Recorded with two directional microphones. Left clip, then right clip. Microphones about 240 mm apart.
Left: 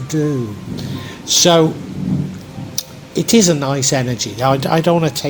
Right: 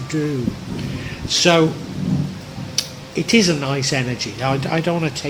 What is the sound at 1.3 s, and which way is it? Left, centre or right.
Speech, left.